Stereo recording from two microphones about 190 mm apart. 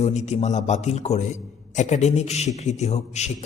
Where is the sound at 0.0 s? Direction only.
35° left (ahead or behind).